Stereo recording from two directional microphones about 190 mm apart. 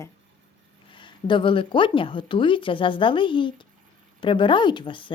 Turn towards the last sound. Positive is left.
turn(degrees=25)  # may be behind; listen again after turning